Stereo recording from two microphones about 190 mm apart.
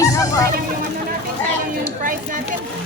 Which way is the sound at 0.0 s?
15° left (ahead or behind).